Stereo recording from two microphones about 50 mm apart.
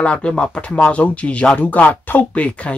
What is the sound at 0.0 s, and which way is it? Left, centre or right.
Speech, centre.